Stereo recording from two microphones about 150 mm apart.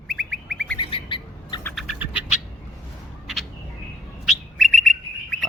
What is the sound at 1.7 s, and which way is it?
Bird, 5° right (ahead or behind).